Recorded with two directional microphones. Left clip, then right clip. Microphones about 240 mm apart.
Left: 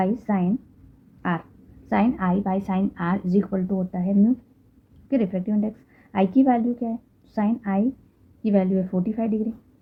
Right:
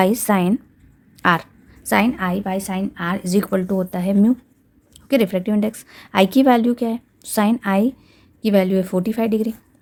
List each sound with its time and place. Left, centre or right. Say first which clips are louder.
0.0 s a woman's voice: right 8 dB; right
1.9 s a woman's voice: right 5 dB; right
3.2 s speech: right 4 dB; right
3.5 s a woman's voice: right 7 dB; right